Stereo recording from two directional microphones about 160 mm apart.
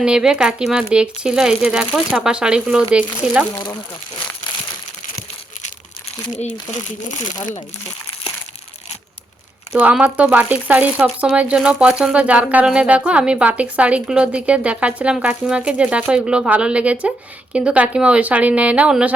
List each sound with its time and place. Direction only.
0.0 s speech: 5° right (ahead or behind)
3.5 s speech: 20° left (ahead or behind)
6.3 s speech: 45° left (ahead or behind)
9.7 s speech: 10° right (ahead or behind)